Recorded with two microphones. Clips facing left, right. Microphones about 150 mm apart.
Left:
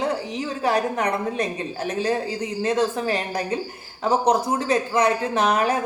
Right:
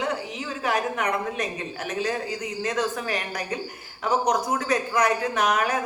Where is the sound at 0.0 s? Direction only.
35° left (ahead or behind).